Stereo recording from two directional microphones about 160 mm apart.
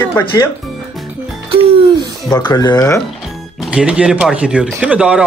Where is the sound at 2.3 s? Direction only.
25° left (ahead or behind).